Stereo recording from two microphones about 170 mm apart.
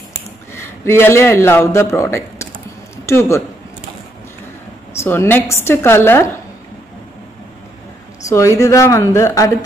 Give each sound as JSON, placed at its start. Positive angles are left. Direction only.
{"t": 0.8, "sound": "a man's voice", "side_deg": 15}
{"t": 4.9, "sound": "a man's voice", "side_deg": 15}
{"t": 8.3, "sound": "a man's voice", "side_deg": 15}